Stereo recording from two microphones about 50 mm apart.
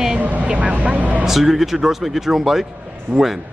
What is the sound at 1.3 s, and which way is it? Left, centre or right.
A man's voice, centre.